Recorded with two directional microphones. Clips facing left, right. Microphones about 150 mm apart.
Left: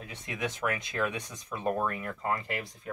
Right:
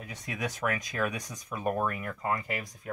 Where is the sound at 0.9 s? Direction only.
10° right (ahead or behind).